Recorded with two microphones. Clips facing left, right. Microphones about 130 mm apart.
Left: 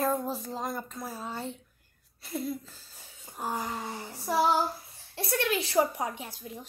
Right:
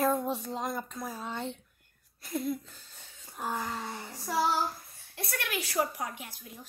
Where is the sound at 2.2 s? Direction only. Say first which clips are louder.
Right 1 dB; centre (ahead or behind).